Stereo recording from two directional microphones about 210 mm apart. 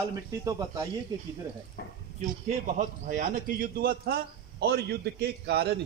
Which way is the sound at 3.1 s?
40° right (ahead or behind).